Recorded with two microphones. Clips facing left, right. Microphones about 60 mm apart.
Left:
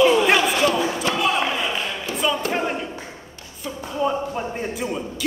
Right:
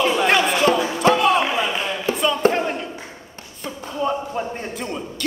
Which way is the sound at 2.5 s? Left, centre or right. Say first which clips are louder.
Right 1 dB; centre.